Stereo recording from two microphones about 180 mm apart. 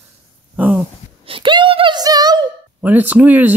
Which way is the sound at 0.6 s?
5° right (ahead or behind).